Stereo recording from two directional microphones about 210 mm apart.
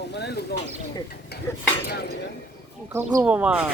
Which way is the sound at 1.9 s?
50° left (ahead or behind).